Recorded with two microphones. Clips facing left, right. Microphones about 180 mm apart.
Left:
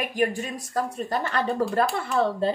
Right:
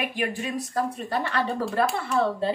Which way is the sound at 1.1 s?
45° left (ahead or behind).